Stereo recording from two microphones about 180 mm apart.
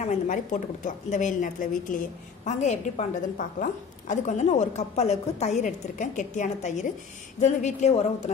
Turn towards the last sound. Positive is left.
turn(degrees=40)  # may be behind; listen again after turning